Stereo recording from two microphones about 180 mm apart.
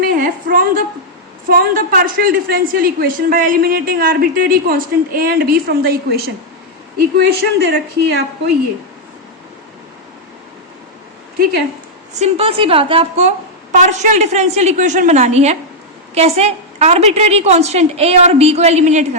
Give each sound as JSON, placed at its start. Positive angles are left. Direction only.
{"t": 0.0, "sound": "a sound", "side_deg": -50}
{"t": 1.5, "sound": "a woman's voice", "side_deg": -50}
{"t": 12.2, "sound": "a woman's voice", "side_deg": -30}